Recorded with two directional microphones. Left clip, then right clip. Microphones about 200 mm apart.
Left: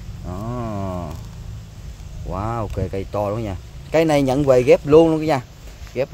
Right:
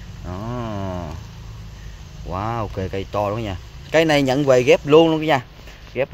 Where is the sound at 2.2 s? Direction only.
Centre (ahead or behind).